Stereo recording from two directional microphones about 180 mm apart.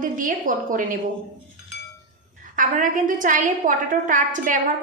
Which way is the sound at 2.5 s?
45° right (ahead or behind).